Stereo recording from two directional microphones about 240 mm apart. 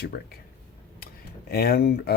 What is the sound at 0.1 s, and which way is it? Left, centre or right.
Speech, left.